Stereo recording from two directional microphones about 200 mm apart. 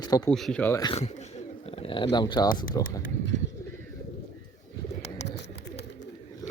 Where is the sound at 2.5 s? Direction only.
45° left (ahead or behind).